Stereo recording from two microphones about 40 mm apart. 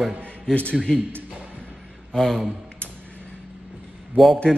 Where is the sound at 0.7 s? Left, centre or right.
Centre.